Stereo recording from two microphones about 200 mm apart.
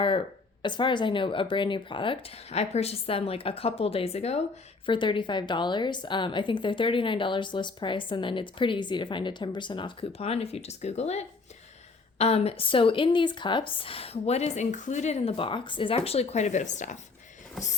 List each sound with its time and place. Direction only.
0.6 s a woman's voice: 25° left (ahead or behind)